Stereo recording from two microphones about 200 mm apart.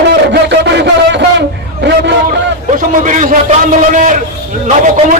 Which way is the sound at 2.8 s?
40° right (ahead or behind).